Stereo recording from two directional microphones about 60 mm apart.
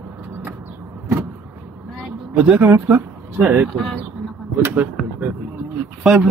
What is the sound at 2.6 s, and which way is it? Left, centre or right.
Speech, right.